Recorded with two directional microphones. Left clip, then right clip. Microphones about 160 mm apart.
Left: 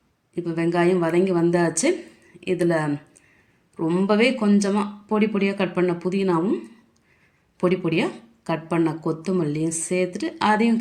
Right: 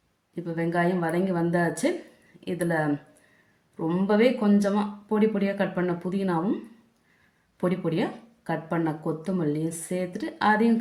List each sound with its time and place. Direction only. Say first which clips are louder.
0.3 s speech: left 5 dB; 20° left (ahead or behind)
8.4 s speech: left 5 dB; 20° left (ahead or behind)